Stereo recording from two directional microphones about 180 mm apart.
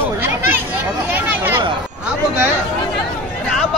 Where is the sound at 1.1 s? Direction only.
10° right (ahead or behind).